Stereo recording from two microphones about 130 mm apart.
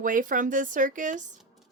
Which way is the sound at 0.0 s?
90° right.